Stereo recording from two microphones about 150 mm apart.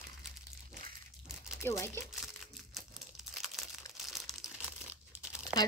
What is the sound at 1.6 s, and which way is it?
Speech, 15° left (ahead or behind).